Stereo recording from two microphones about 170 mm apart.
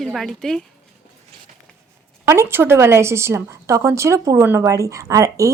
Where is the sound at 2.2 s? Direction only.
15° right (ahead or behind).